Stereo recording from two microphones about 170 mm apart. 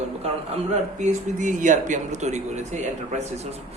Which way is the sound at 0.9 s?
45° right (ahead or behind).